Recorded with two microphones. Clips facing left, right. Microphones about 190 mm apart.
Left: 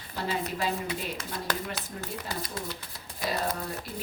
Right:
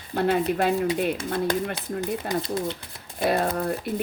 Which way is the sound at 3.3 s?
55° right (ahead or behind).